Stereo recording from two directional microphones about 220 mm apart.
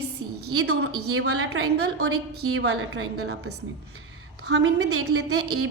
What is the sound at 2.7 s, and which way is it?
Speech, 70° right (ahead or behind).